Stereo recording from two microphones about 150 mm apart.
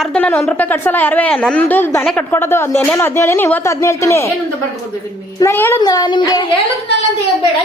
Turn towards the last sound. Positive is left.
turn(degrees=25)  # may be behind; listen again after turning